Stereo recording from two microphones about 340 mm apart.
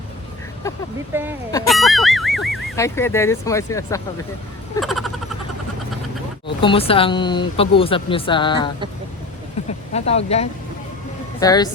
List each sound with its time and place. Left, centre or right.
0.7 s speech: centre
4.8 s a sound: centre
6.6 s speech: centre